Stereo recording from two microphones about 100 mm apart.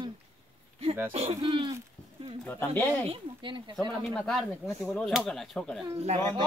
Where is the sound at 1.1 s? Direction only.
75° right (ahead or behind); by 1.7 s 60° right (ahead or behind).